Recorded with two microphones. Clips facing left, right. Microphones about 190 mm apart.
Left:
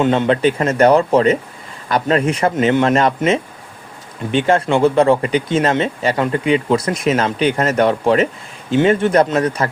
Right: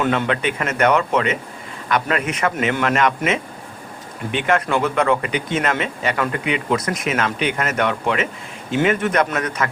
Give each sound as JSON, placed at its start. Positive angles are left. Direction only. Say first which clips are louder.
{"t": 0.0, "sound": "speech", "louder": "left 5 dB", "side_deg": 20}
{"t": 0.3, "sound": "speech", "louder": "left 7 dB", "side_deg": 30}